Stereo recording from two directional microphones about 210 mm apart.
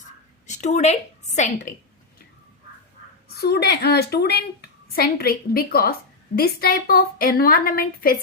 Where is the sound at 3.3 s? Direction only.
50° left (ahead or behind).